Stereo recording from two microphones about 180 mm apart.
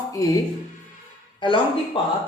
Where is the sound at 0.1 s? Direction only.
20° left (ahead or behind).